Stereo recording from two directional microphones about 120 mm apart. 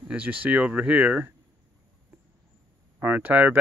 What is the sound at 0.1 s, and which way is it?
Speech, 15° right (ahead or behind).